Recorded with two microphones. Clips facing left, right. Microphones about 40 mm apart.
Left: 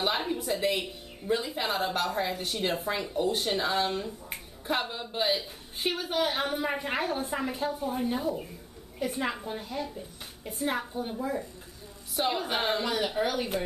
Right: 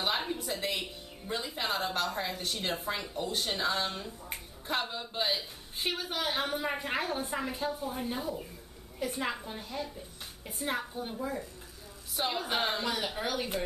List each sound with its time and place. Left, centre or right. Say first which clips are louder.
0.0 s speech: left 3 dB; centre